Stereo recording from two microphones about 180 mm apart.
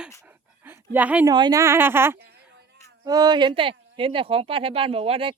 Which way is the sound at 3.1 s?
25° right (ahead or behind).